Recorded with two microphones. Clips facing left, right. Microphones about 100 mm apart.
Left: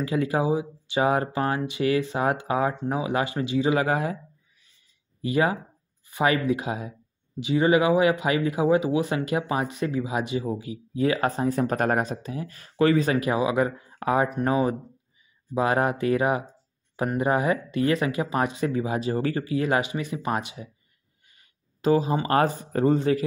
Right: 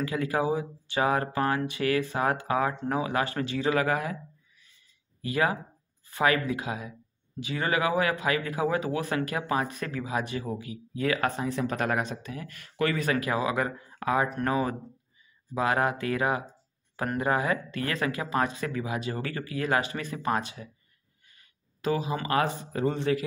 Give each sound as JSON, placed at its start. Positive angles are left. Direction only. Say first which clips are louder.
{"t": 0.0, "sound": "speech", "louder": "left 3 dB", "side_deg": 25}
{"t": 5.2, "sound": "speech", "louder": "left 4 dB", "side_deg": 25}